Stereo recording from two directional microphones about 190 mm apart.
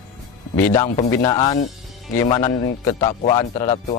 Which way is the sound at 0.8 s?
35° left (ahead or behind).